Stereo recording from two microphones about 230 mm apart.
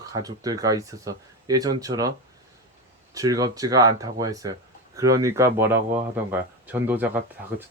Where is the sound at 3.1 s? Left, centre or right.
Centre.